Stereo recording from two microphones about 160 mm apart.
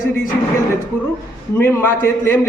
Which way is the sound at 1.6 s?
15° left (ahead or behind).